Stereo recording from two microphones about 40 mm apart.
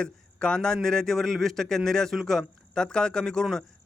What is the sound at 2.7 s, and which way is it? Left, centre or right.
Speech, centre.